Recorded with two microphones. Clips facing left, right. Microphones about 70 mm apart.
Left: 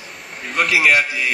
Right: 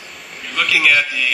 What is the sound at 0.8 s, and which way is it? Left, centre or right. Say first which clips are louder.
Speech: even; left.